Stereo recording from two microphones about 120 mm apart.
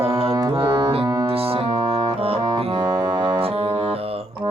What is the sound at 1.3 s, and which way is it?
Music, 55° right (ahead or behind).